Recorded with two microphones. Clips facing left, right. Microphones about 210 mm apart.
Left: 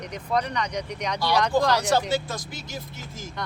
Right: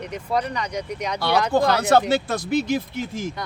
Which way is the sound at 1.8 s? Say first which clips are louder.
Right 5 dB; 60° right (ahead or behind).